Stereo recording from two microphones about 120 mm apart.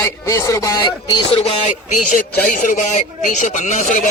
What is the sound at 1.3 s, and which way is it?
Speech, 55° left (ahead or behind).